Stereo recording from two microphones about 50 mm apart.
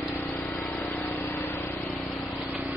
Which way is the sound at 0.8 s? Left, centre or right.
Left.